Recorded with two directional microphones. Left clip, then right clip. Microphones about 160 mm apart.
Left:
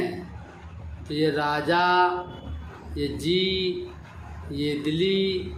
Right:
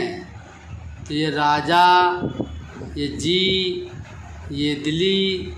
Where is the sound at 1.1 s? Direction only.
30° right (ahead or behind).